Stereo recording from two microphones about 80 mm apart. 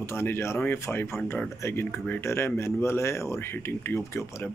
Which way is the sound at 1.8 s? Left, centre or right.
Centre.